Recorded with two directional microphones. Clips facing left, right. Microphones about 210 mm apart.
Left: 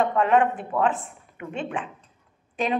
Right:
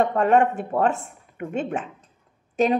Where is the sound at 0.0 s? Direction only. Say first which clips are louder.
Right 2 dB; 40° right (ahead or behind).